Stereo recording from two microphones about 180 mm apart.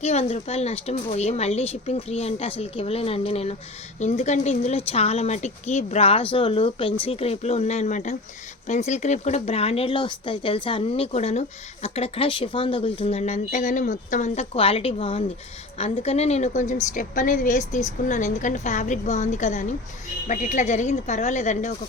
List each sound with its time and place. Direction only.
0.0 s speech: 35° left (ahead or behind)